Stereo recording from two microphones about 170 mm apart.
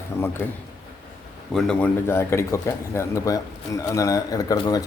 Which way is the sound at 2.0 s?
15° left (ahead or behind).